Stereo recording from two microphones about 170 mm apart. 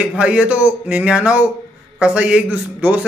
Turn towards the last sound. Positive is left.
turn(degrees=-10)  # may be behind; listen again after turning